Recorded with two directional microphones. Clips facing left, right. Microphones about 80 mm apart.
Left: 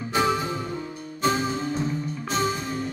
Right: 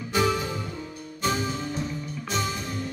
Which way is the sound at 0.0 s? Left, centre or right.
Left.